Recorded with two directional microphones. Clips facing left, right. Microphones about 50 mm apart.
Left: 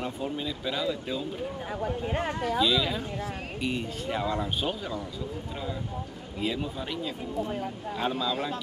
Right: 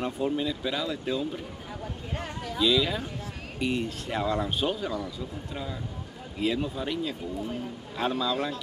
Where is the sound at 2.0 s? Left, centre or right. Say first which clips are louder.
Left 5 dB; left.